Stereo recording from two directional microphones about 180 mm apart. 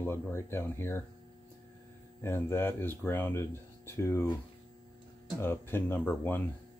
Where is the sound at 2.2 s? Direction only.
15° left (ahead or behind).